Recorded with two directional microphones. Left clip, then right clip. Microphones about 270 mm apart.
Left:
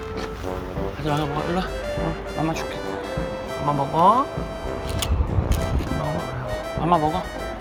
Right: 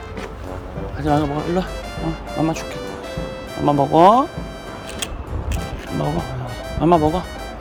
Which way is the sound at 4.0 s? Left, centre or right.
Right.